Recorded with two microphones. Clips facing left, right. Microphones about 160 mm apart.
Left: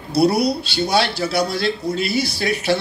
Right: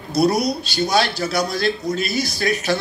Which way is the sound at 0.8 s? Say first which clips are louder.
Even; 30° left (ahead or behind).